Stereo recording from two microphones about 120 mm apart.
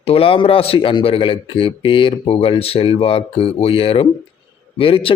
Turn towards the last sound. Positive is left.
turn(degrees=50)  # may be behind; listen again after turning